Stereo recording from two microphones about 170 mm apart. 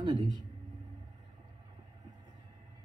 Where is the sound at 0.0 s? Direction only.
25° right (ahead or behind).